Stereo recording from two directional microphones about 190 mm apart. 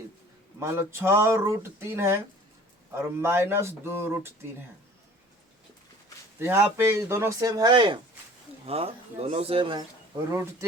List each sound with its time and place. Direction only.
0.6 s speech: 15° right (ahead or behind)
6.4 s speech: 10° right (ahead or behind)
10.3 s speech: 15° right (ahead or behind)